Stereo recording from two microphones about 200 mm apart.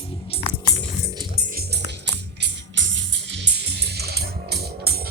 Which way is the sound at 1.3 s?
50° right (ahead or behind).